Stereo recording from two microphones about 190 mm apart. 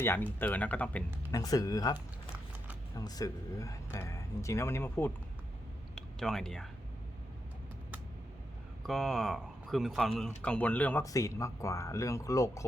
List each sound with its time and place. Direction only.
0.0 s speech: 10° left (ahead or behind)
1.3 s speech: 20° left (ahead or behind)
3.0 s speech: 20° left (ahead or behind)
6.1 s speech: centre (ahead or behind)
8.8 s speech: centre (ahead or behind); by 12.6 s 15° left (ahead or behind)